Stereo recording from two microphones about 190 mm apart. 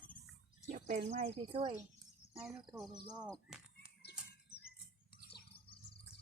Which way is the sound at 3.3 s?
5° right (ahead or behind).